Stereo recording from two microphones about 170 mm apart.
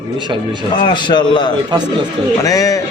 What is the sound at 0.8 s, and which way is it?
A man's voice, 25° left (ahead or behind).